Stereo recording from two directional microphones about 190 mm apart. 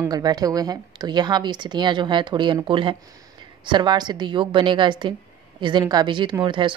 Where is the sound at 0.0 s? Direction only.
20° right (ahead or behind).